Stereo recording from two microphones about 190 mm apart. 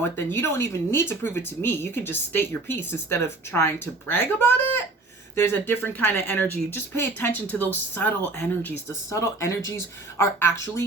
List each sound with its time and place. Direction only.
0.0 s speech: 10° left (ahead or behind)